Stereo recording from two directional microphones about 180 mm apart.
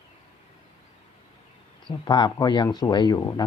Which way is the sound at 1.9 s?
25° left (ahead or behind).